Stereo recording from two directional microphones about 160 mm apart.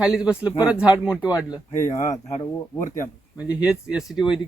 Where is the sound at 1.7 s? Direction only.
50° left (ahead or behind).